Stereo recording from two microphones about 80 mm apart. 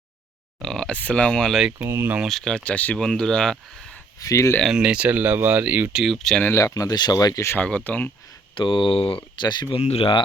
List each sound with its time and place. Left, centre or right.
0.6 s a sound: centre
0.9 s speech: centre
1.8 s speech: right
2.2 s speech: centre
3.0 s speech: centre
4.2 s speech: left
4.6 s speech: centre
5.9 s speech: centre
6.5 s speech: left
7.6 s speech: centre
8.5 s speech: left